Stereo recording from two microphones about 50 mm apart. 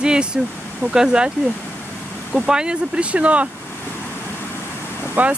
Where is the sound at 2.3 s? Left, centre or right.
Centre.